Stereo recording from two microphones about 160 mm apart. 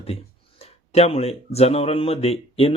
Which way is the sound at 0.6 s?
40° left (ahead or behind).